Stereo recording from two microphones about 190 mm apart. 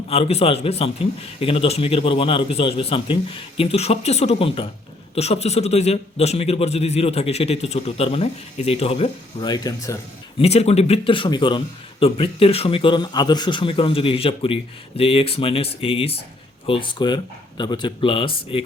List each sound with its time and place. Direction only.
0.1 s a man's voice: 35° left (ahead or behind); by 10.0 s 20° left (ahead or behind)
10.3 s a man's voice: 35° left (ahead or behind)